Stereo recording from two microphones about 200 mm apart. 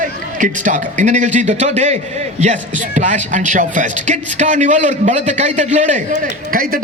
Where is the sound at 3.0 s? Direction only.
40° right (ahead or behind).